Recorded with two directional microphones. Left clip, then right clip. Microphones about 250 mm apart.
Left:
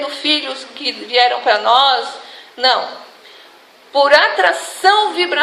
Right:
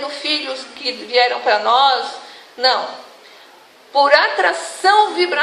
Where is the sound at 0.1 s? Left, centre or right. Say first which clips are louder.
Left 3 dB; left.